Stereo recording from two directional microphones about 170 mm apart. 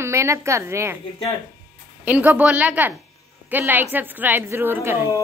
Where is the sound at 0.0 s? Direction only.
15° right (ahead or behind).